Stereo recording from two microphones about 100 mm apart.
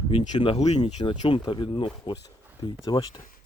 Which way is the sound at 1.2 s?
55° left (ahead or behind).